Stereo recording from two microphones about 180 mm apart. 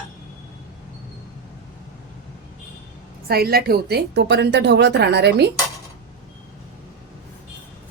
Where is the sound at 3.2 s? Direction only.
60° right (ahead or behind).